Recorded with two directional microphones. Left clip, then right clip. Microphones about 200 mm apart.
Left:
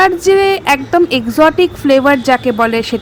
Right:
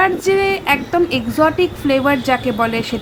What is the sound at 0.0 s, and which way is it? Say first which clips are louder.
A woman's voice: left 5 dB; 30° left (ahead or behind).